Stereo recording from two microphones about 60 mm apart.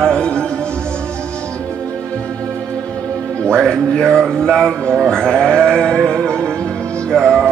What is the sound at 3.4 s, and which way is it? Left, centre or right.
Speech, centre.